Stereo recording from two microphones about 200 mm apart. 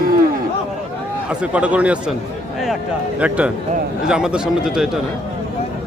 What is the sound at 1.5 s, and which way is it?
Speech, 5° right (ahead or behind).